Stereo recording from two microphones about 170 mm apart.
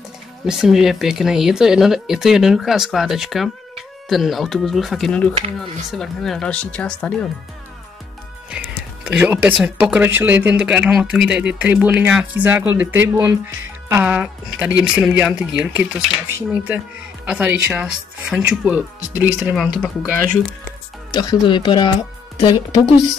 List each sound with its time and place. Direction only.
0.5 s speech: centre (ahead or behind)
8.5 s music: 5° right (ahead or behind)
9.0 s speech: 10° right (ahead or behind)
21.1 s speech: 25° left (ahead or behind)